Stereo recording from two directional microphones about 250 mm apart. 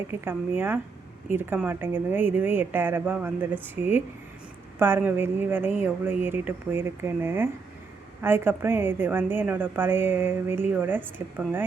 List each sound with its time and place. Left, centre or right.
0.1 s a woman's voice: centre